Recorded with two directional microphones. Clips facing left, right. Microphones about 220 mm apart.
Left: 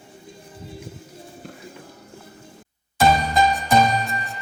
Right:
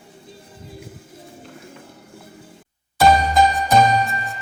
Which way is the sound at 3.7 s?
Centre (ahead or behind).